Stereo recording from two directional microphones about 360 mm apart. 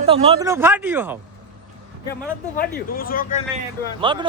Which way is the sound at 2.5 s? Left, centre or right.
Left.